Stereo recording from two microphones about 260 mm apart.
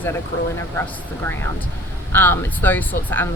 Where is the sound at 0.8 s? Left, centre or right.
Centre.